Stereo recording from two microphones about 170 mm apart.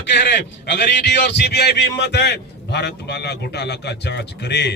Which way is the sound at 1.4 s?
75° left (ahead or behind).